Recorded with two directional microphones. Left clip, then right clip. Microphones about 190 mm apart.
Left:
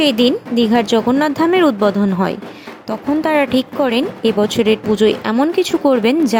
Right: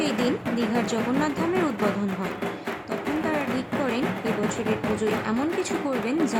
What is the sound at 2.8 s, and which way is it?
Speech, 45° left (ahead or behind).